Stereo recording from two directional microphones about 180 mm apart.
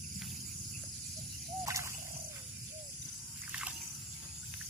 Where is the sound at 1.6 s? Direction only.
15° right (ahead or behind).